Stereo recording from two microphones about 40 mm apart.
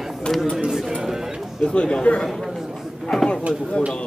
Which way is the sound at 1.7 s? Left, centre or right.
Left.